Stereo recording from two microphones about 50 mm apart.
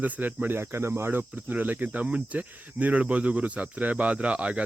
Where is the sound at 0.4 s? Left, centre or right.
Right.